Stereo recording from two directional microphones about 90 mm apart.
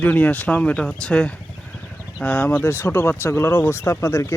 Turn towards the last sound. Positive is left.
turn(degrees=30)  # may be behind; listen again after turning